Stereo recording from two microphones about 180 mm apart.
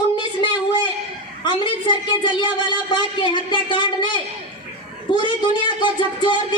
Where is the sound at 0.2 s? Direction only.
25° left (ahead or behind).